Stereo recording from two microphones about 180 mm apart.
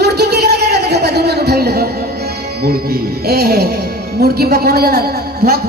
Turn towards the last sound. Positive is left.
turn(degrees=-60)  # may be behind; listen again after turning